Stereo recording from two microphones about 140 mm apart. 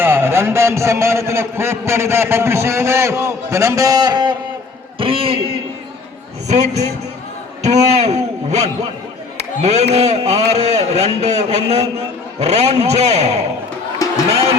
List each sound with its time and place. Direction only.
0.0 s a man's voice: 15° right (ahead or behind); by 5.5 s 40° right (ahead or behind)
6.5 s a man's voice: 55° right (ahead or behind)
14.0 s a sound: 25° left (ahead or behind)